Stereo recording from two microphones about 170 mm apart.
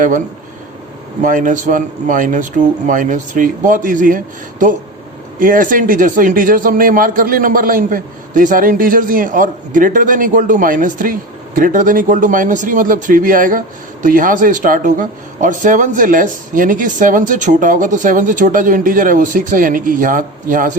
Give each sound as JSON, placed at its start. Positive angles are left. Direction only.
{"t": 1.2, "sound": "a man's voice", "side_deg": -50}
{"t": 5.4, "sound": "a man's voice", "side_deg": -50}